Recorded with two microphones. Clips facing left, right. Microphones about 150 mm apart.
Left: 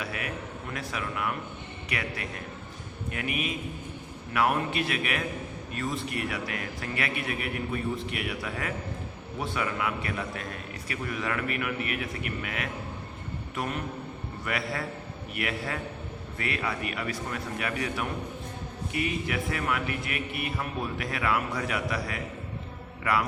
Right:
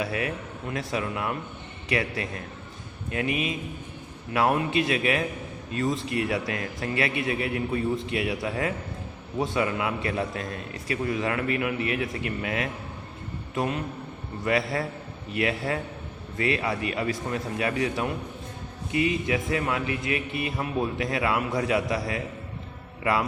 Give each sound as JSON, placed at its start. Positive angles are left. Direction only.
{"t": 0.0, "sound": "a man's voice", "side_deg": -30}
{"t": 14.4, "sound": "a man's voice", "side_deg": -25}